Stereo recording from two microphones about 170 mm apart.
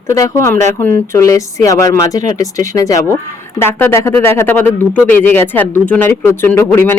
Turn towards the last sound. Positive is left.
turn(degrees=15)  # may be behind; listen again after turning